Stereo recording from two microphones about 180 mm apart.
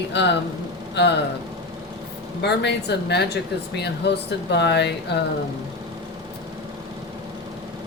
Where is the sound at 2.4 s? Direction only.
70° left (ahead or behind).